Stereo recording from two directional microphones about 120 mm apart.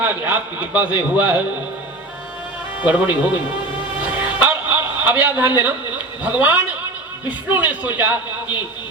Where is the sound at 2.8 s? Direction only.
15° right (ahead or behind).